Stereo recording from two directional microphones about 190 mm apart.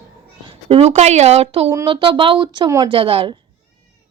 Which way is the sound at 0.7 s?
35° right (ahead or behind).